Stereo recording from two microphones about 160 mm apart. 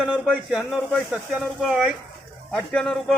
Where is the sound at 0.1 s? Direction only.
Centre (ahead or behind).